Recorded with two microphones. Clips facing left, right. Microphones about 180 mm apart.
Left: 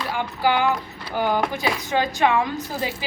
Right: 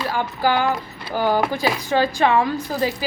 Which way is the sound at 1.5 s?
20° left (ahead or behind).